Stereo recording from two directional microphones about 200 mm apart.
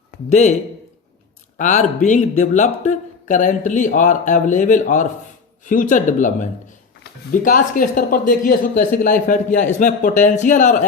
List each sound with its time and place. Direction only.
0.3 s a man's voice: 35° left (ahead or behind)
1.5 s a man's voice: 35° left (ahead or behind)